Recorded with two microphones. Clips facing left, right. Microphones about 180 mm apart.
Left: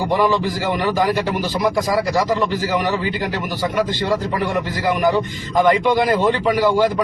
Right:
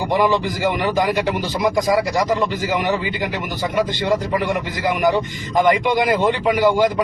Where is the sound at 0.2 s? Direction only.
20° right (ahead or behind).